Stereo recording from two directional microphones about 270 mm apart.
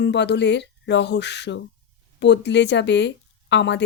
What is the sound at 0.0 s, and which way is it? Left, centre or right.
Speech, left.